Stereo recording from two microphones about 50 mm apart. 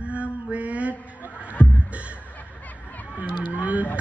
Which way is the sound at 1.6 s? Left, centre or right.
Left.